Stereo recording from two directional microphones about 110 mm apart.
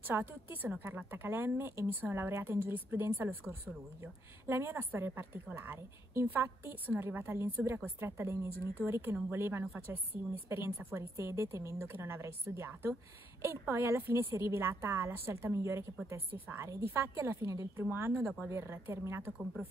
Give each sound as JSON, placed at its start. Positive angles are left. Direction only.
{"t": 0.0, "sound": "a woman's voice", "side_deg": -20}